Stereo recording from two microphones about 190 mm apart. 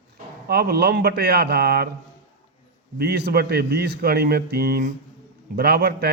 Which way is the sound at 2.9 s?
60° right (ahead or behind).